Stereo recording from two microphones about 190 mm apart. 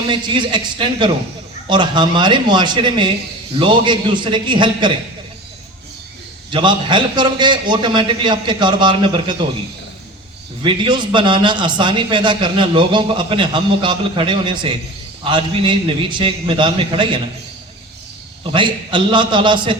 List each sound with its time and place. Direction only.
0.1 s a man's voice: 25° right (ahead or behind)
6.5 s a man's voice: 25° right (ahead or behind)
10.6 s a man's voice: 25° right (ahead or behind)
18.4 s a man's voice: 25° right (ahead or behind)